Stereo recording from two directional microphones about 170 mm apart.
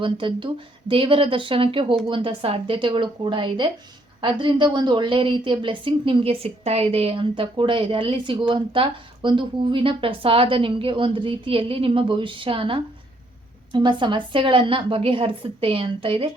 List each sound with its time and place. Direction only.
0.0 s a woman's voice: 30° right (ahead or behind)